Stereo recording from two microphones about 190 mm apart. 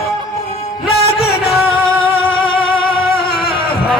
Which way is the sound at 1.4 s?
30° left (ahead or behind).